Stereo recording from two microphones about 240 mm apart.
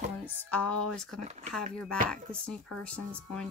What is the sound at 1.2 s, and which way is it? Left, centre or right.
Speech, right.